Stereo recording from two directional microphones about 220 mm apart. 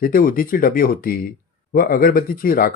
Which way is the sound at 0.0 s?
40° left (ahead or behind).